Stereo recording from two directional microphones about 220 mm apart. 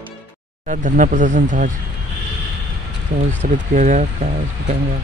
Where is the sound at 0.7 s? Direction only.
35° right (ahead or behind).